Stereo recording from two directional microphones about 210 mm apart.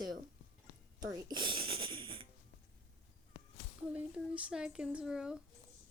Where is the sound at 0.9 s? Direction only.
20° right (ahead or behind).